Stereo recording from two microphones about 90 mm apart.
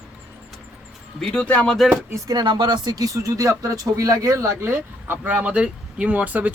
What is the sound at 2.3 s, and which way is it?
Speech, 55° right (ahead or behind).